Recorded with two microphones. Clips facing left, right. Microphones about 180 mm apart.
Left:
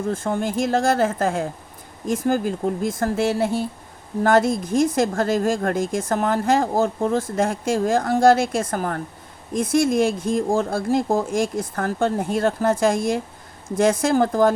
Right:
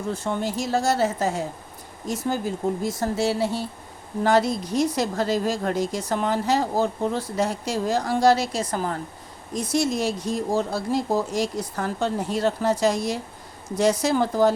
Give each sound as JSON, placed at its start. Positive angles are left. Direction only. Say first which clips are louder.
{"t": 0.0, "sound": "a woman's voice", "louder": "left 3 dB", "side_deg": 50}